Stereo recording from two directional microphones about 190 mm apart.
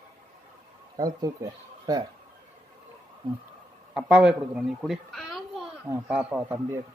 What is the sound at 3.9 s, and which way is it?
A child's voice, 5° right (ahead or behind).